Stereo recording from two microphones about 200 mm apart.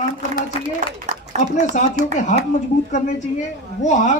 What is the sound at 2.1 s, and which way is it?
Speech, 40° left (ahead or behind).